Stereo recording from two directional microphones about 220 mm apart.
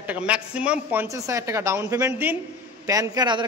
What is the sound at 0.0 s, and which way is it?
A woman's voice, 5° right (ahead or behind).